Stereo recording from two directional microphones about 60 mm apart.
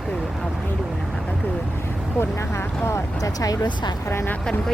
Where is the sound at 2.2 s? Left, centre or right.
Left.